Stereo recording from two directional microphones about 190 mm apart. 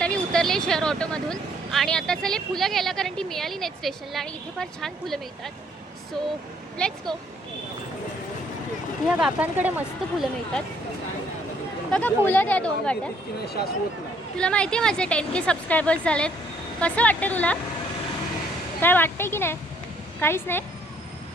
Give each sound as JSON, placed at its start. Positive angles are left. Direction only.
{"t": 0.0, "sound": "speech", "side_deg": 5}
{"t": 6.7, "sound": "speech", "side_deg": 5}
{"t": 9.0, "sound": "speech", "side_deg": -5}
{"t": 11.9, "sound": "speech", "side_deg": 5}
{"t": 13.4, "sound": "speech", "side_deg": 55}
{"t": 14.3, "sound": "speech", "side_deg": 5}
{"t": 18.8, "sound": "speech", "side_deg": 10}